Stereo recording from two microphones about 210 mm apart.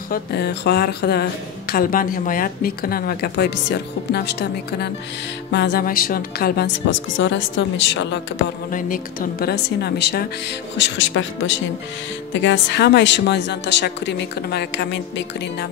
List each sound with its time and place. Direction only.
0.1 s a woman's voice: 50° left (ahead or behind)
8.6 s a woman's voice: 40° left (ahead or behind)